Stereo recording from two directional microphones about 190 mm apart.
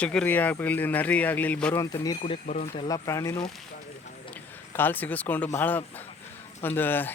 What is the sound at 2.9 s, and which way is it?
Speech, 15° left (ahead or behind).